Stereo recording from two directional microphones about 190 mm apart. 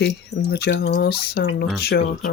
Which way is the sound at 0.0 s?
60° left (ahead or behind).